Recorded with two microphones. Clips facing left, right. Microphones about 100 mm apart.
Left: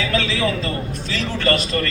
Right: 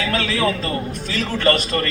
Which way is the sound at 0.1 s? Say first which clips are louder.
Right 2 dB; 45° right (ahead or behind).